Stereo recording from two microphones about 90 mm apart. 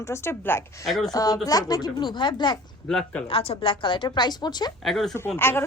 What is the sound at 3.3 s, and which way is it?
A woman's voice, 90° left.